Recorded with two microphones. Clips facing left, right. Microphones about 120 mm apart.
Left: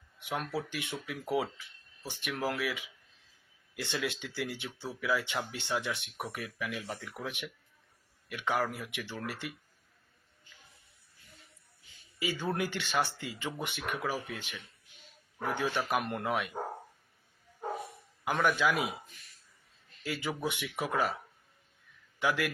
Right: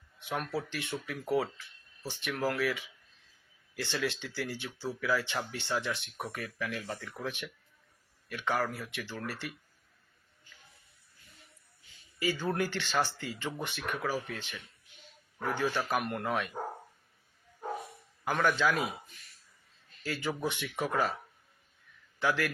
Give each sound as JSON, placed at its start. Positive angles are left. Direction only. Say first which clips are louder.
{"t": 0.2, "sound": "speech", "louder": "even", "side_deg": 15}
{"t": 12.2, "sound": "speech", "louder": "right 2 dB", "side_deg": 15}
{"t": 18.4, "sound": "speech", "louder": "even", "side_deg": 15}
{"t": 20.0, "sound": "speech", "louder": "right 1 dB", "side_deg": 15}
{"t": 22.2, "sound": "speech", "louder": "even", "side_deg": 15}